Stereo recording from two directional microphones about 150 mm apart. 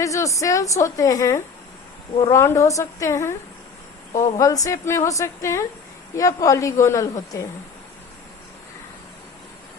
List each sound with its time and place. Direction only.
0.0 s a woman's voice: 20° left (ahead or behind)
4.1 s a woman's voice: 55° left (ahead or behind)
4.4 s a woman's voice: 25° left (ahead or behind)